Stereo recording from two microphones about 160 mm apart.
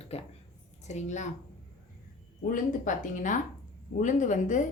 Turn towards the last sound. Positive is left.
turn(degrees=55)  # may be behind; listen again after turning